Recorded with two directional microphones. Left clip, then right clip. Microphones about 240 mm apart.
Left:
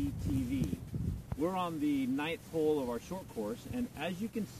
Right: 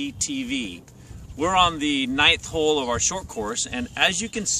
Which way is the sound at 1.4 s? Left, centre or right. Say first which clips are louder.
Right 15 dB; right.